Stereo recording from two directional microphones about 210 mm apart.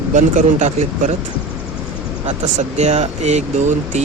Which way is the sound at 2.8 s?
30° right (ahead or behind).